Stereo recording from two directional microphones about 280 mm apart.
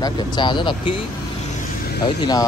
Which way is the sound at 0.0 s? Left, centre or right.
Centre.